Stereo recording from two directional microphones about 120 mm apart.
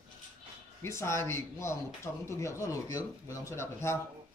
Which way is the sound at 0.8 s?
20° left (ahead or behind).